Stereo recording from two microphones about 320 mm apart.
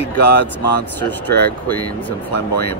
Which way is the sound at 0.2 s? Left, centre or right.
Left.